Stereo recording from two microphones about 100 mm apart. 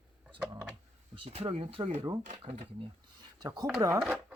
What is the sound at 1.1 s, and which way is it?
Speech, 65° right (ahead or behind).